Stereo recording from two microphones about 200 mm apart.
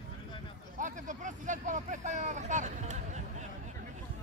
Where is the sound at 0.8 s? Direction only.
40° right (ahead or behind).